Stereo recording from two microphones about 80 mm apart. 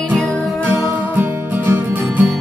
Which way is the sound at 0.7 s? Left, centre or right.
Right.